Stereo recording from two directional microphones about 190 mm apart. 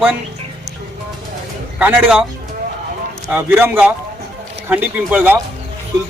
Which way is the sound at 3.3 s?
10° right (ahead or behind).